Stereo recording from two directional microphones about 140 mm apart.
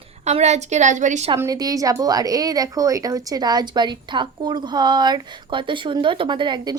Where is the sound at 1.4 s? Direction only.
25° right (ahead or behind).